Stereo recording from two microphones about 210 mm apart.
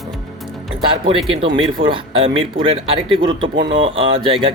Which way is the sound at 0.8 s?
25° right (ahead or behind).